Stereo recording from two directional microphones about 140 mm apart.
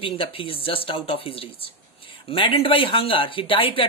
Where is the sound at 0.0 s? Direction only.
40° left (ahead or behind).